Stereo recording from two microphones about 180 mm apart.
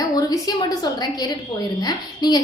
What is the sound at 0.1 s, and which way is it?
A woman's voice, 20° left (ahead or behind).